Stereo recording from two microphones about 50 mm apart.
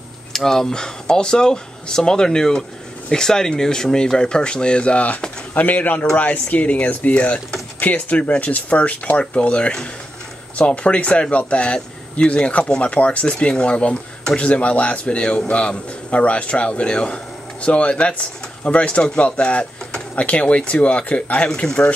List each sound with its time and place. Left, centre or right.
0.3 s speech: centre